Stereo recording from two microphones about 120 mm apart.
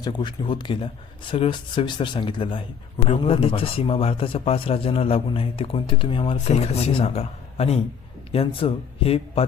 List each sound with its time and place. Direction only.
0.0 s a man's voice: 35° left (ahead or behind)
6.3 s speech: 65° left (ahead or behind)